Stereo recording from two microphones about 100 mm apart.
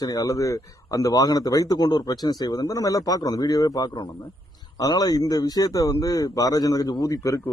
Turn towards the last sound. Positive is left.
turn(degrees=35)  # may be behind; listen again after turning